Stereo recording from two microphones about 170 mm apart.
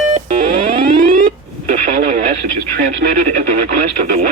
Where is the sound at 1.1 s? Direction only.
55° right (ahead or behind).